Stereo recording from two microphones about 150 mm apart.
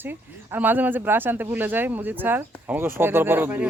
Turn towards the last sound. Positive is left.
turn(degrees=-15)  # may be behind; listen again after turning